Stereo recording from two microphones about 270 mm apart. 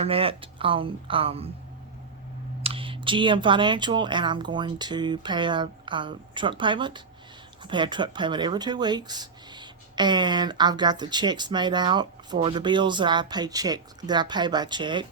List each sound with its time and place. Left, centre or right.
0.0 s speech: right
2.6 s speech: centre